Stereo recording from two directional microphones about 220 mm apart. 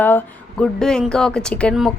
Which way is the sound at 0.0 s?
10° left (ahead or behind).